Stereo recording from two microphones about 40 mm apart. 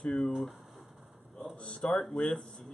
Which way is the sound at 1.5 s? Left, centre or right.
Left.